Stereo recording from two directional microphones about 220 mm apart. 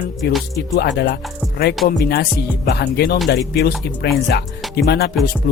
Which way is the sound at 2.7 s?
45° left (ahead or behind).